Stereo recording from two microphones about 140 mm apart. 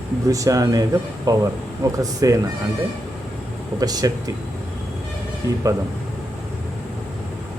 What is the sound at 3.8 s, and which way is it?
Speech, 25° right (ahead or behind).